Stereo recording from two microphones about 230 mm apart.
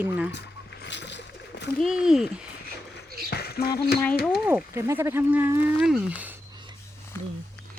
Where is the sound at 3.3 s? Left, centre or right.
Left.